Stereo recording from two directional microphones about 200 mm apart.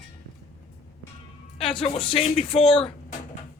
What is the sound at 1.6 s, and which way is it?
Speech, 25° left (ahead or behind).